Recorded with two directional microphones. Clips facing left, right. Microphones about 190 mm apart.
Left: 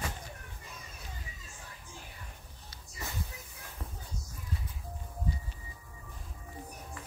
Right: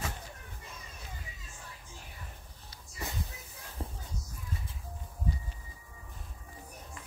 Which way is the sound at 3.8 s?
30° right (ahead or behind).